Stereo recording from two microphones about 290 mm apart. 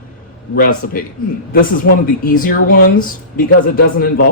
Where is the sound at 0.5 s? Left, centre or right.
Left.